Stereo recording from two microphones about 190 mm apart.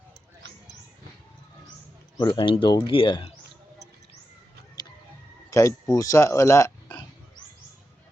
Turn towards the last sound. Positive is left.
turn(degrees=15)  # may be behind; listen again after turning